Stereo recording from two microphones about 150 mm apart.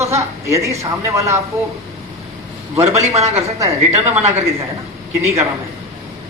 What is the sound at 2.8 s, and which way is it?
Speech, 50° right (ahead or behind).